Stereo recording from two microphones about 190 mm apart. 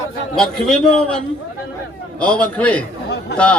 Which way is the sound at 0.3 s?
5° left (ahead or behind).